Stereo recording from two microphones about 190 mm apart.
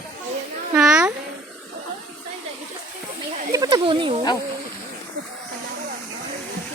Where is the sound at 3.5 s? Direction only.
20° right (ahead or behind).